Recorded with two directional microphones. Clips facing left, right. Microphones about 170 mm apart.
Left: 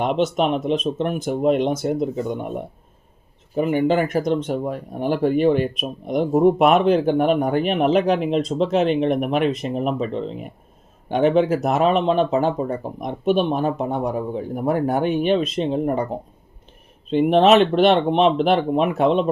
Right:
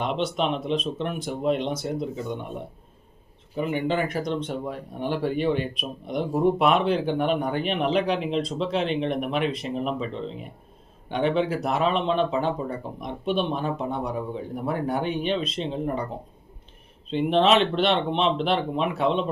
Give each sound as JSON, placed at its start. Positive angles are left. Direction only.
{"t": 0.0, "sound": "speech", "side_deg": 45}
{"t": 3.5, "sound": "speech", "side_deg": 45}
{"t": 11.1, "sound": "speech", "side_deg": 45}
{"t": 17.1, "sound": "speech", "side_deg": 50}